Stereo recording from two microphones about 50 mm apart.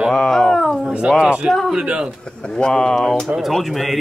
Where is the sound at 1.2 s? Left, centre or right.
Right.